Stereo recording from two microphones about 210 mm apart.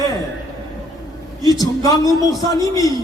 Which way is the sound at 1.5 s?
15° left (ahead or behind).